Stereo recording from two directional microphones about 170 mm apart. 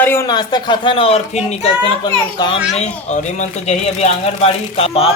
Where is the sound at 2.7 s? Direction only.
45° left (ahead or behind).